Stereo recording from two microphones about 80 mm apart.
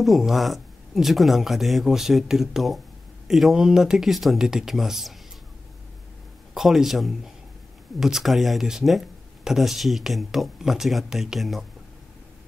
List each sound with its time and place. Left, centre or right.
0.0 s speech: centre
6.5 s speech: centre